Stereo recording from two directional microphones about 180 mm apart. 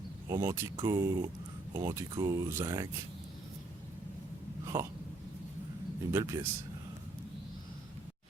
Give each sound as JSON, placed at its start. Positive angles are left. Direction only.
{"t": 0.3, "sound": "speech", "side_deg": -20}
{"t": 4.7, "sound": "speech", "side_deg": -15}
{"t": 6.1, "sound": "speech", "side_deg": -15}